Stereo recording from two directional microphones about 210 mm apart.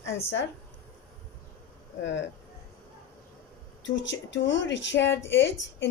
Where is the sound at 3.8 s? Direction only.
60° left (ahead or behind).